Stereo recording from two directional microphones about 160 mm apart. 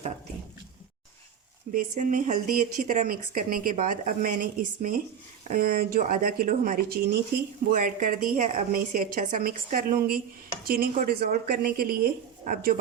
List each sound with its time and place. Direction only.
1.7 s a woman's voice: 55° right (ahead or behind); by 12.0 s 70° right (ahead or behind)
12.5 s speech: 60° right (ahead or behind)